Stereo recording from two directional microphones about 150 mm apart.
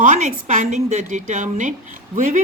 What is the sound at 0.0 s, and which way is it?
A woman's voice, 60° right (ahead or behind).